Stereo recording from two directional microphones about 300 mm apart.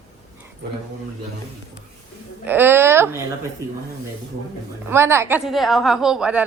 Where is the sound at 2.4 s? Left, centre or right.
Centre.